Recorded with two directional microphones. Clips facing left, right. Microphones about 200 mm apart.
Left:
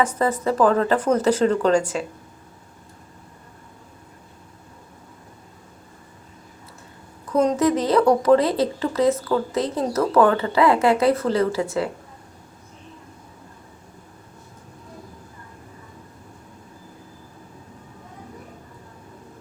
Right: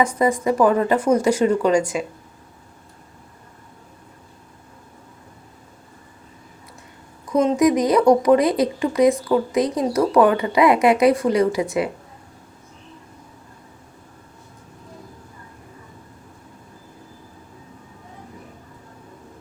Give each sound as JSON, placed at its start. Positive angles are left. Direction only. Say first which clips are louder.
{"t": 0.0, "sound": "speech", "louder": "right 2 dB", "side_deg": -10}
{"t": 7.3, "sound": "speech", "louder": "right 2 dB", "side_deg": -10}